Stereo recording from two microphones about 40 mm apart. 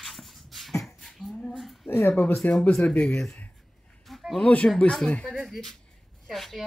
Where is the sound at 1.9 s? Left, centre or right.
Left.